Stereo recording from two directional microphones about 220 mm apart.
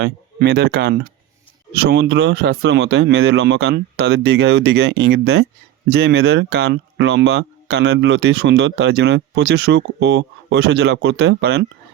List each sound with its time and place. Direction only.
0.0 s speech: 45° right (ahead or behind)